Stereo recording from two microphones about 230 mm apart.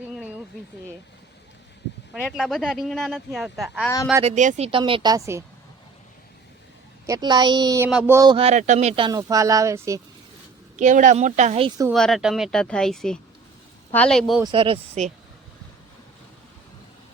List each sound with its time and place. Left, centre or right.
2.2 s speech: centre
4.2 s speech: right; by 5.4 s centre
7.1 s speech: centre
10.8 s speech: right
11.9 s speech: centre
14.4 s speech: right